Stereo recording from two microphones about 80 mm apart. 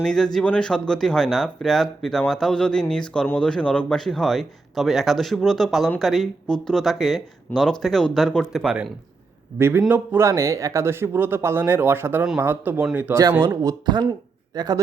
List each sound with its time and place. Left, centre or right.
0.0 s a man's voice: centre
8.5 s speech: centre
9.6 s speech: right
13.5 s speech: right
13.8 s speech: right